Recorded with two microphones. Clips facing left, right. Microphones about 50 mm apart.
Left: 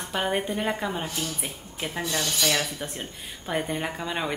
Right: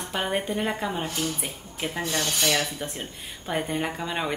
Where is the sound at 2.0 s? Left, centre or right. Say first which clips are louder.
Even; right.